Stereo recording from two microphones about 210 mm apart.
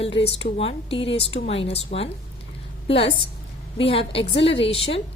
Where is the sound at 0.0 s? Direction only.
30° left (ahead or behind).